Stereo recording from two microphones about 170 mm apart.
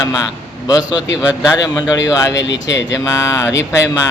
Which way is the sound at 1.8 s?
20° left (ahead or behind).